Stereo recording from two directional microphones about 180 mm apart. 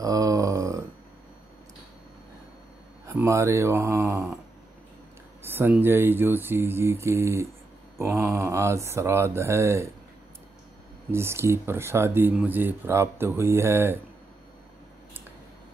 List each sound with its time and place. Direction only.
0.0 s a sound: 20° right (ahead or behind)
3.1 s speech: 15° right (ahead or behind)
5.4 s speech: 10° right (ahead or behind)
11.1 s speech: 15° right (ahead or behind)